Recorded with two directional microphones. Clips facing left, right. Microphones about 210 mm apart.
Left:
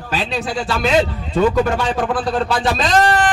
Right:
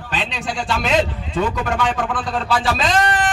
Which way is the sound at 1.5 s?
40° left (ahead or behind).